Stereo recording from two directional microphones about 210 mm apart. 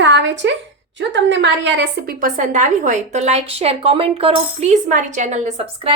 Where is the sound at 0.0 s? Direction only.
60° right (ahead or behind).